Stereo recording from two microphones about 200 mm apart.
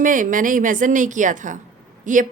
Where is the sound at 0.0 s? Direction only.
40° right (ahead or behind).